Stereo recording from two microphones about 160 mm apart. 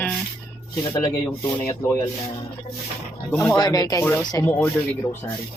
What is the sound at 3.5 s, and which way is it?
Speech, 25° left (ahead or behind).